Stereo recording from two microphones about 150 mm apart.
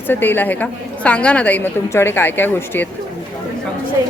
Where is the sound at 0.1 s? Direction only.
15° left (ahead or behind).